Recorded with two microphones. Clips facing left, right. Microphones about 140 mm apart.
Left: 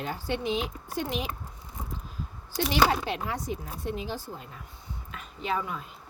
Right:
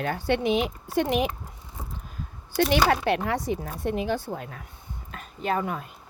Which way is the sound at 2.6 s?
60° right (ahead or behind).